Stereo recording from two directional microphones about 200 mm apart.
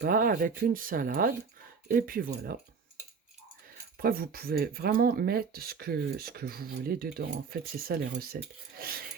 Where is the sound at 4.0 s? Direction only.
45° right (ahead or behind).